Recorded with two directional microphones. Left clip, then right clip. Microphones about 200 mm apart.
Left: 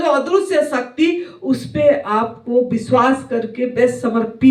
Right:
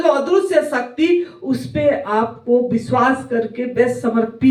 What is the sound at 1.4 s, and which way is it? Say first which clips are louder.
Speech: left 3 dB; 40° left (ahead or behind).